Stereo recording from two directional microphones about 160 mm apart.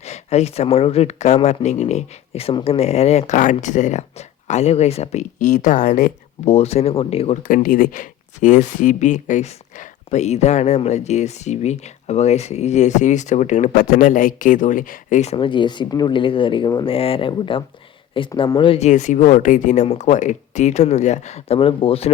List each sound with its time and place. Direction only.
0.0 s speech: 45° left (ahead or behind)
7.4 s speech: 60° left (ahead or behind); by 18.9 s 35° left (ahead or behind)
18.9 s speech: 50° left (ahead or behind)